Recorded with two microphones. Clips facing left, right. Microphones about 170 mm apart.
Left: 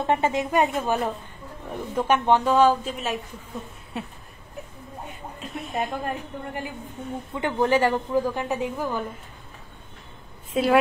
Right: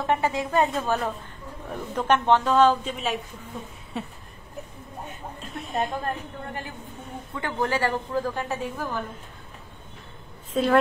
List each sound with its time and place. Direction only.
0.0 s a woman's voice: 20° left (ahead or behind); by 4.1 s centre (ahead or behind)
5.4 s a sound: centre (ahead or behind)
6.0 s a woman's voice: 15° left (ahead or behind)
10.5 s a woman's voice: 10° left (ahead or behind)